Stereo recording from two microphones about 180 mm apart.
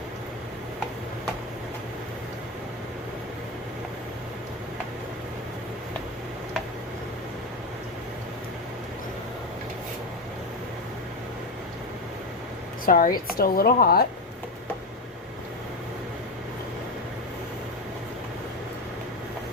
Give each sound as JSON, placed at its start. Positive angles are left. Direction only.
{"t": 12.8, "sound": "a woman's voice", "side_deg": 50}